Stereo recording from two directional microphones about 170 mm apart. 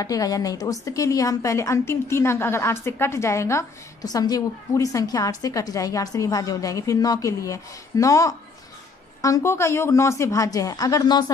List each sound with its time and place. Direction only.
0.0 s a woman's voice: 20° left (ahead or behind)